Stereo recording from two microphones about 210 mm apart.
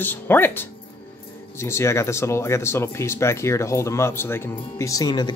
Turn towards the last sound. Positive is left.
turn(degrees=20)  # may be behind; listen again after turning